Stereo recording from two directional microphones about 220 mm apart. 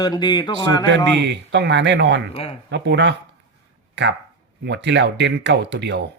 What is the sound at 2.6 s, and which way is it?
Speech, 55° right (ahead or behind).